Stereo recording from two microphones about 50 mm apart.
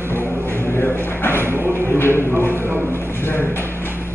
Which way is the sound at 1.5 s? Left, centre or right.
Right.